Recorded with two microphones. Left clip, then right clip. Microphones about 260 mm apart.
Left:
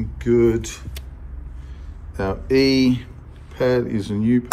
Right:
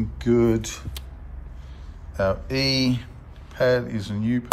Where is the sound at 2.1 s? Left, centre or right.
Centre.